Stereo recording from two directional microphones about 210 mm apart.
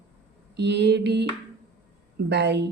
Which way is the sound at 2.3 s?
55° right (ahead or behind).